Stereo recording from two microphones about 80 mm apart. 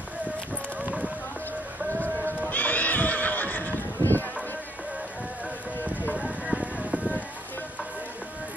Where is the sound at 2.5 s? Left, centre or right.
Left.